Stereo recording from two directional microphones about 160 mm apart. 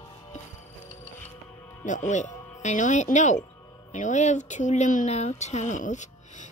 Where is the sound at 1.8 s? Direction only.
50° left (ahead or behind).